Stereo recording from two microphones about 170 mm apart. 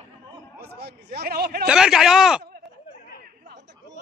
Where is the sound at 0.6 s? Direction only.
70° right (ahead or behind).